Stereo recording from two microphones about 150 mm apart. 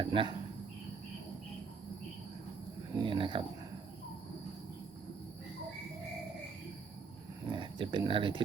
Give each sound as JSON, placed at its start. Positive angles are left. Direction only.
{"t": 0.0, "sound": "speech", "side_deg": -35}
{"t": 2.9, "sound": "a sound", "side_deg": -35}
{"t": 7.5, "sound": "speech", "side_deg": -30}